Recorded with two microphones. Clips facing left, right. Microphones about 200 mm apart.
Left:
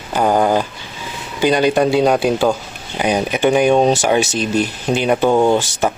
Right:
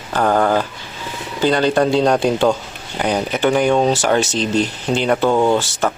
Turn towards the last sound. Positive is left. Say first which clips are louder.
# left 1 dB
turn(degrees=15)  # may be behind; listen again after turning